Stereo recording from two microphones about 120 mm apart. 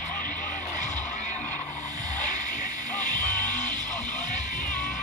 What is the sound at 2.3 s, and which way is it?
Music, 90° left.